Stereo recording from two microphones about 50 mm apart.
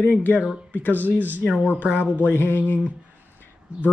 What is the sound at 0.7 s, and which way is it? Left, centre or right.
Speech, left.